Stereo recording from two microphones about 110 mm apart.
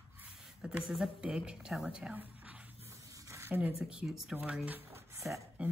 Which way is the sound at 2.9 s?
30° right (ahead or behind).